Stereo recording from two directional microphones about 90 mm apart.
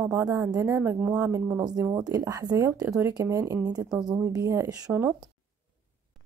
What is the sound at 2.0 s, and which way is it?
A woman's voice, 45° right (ahead or behind).